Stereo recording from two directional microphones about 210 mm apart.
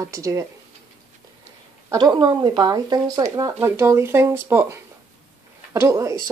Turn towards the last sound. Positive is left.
turn(degrees=-15)  # may be behind; listen again after turning